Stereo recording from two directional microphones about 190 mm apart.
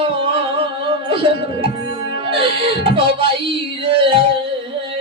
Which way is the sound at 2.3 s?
25° right (ahead or behind).